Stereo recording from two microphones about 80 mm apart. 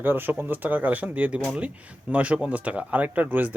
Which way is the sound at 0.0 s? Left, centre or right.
Right.